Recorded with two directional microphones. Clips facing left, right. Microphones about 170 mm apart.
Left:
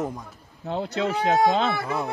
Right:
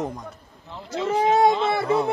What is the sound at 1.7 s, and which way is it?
Speech, 25° right (ahead or behind).